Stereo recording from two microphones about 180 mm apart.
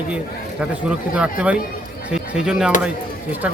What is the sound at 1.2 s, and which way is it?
Speech, 5° right (ahead or behind).